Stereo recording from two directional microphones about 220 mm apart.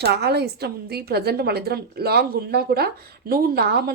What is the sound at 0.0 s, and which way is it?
A woman's voice, 50° right (ahead or behind).